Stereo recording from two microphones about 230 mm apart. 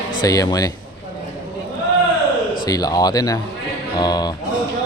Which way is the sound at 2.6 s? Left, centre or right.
Centre.